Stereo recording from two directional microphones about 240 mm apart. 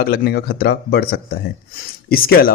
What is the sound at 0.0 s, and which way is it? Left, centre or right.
Speech, left.